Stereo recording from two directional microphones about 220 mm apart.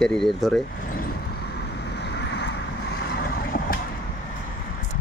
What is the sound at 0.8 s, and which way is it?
Vehicle, 40° left (ahead or behind).